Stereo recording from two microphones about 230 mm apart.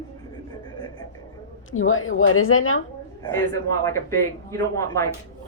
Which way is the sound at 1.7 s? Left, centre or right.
Left.